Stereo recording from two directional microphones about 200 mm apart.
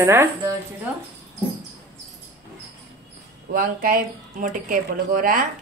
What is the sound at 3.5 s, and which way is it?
Speech, 45° right (ahead or behind).